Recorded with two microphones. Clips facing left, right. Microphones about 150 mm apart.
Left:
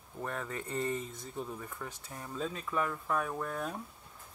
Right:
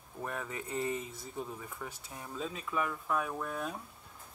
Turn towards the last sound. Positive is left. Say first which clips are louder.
# left 1 dB
turn(degrees=-5)  # may be behind; listen again after turning